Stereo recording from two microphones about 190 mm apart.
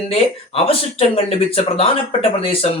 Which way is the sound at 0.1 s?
30° left (ahead or behind).